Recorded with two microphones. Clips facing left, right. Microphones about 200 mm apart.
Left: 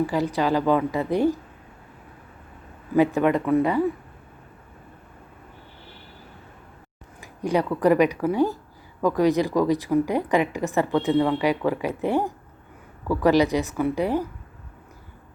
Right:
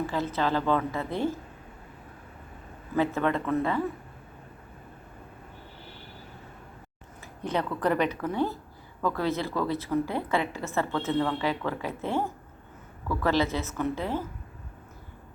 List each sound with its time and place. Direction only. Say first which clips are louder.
0.1 s a woman's voice: left 5 dB; 15° left (ahead or behind)
2.9 s a woman's voice: left 7 dB; 15° left (ahead or behind)
7.2 s a woman's voice: left 6 dB; 10° left (ahead or behind)